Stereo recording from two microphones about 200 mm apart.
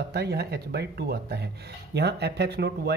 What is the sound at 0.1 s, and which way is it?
Speech, 55° right (ahead or behind).